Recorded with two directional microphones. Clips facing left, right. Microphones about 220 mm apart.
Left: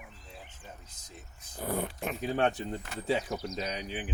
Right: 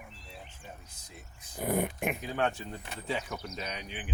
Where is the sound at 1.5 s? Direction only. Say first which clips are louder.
Right 3 dB; 15° right (ahead or behind).